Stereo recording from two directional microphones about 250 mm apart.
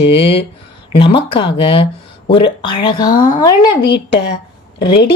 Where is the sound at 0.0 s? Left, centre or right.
Left.